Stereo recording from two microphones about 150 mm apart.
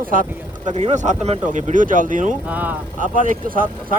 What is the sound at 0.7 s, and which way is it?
Speech, 50° right (ahead or behind).